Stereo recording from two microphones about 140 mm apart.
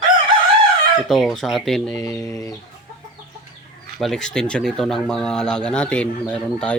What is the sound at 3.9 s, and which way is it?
Speech, centre (ahead or behind).